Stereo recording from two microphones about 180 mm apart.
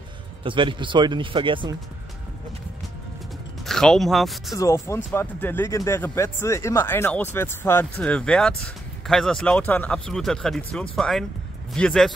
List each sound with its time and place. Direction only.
0.4 s speech: 30° right (ahead or behind)
3.6 s speech: 5° left (ahead or behind)
4.6 s speech: 15° left (ahead or behind)